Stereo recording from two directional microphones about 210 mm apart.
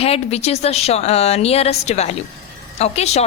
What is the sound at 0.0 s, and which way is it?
A woman's voice, 30° left (ahead or behind).